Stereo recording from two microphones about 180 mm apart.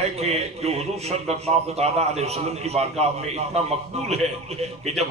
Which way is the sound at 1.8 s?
35° right (ahead or behind).